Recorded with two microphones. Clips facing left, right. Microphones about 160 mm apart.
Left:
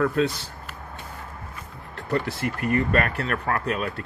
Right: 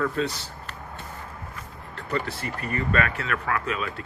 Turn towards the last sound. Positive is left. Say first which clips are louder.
# left 2 dB
turn(degrees=50)  # may be behind; listen again after turning